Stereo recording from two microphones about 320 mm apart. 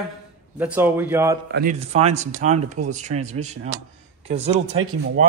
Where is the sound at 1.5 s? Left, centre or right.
Right.